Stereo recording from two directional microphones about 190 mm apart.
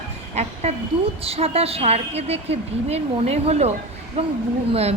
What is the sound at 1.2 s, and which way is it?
A woman's voice, 30° right (ahead or behind).